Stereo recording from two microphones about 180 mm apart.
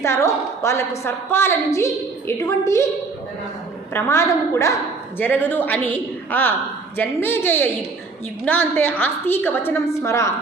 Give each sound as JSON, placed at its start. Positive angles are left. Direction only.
{"t": 0.0, "sound": "a woman's voice", "side_deg": 15}
{"t": 3.9, "sound": "a woman's voice", "side_deg": 15}